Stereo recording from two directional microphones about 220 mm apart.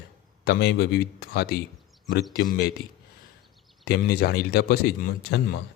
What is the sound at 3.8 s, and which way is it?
Speech, 45° left (ahead or behind).